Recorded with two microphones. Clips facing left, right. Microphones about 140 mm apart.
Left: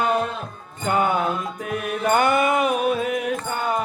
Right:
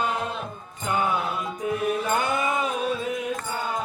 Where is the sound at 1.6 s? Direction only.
75° left (ahead or behind).